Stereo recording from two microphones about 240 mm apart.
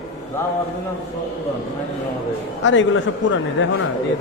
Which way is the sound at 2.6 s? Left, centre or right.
Left.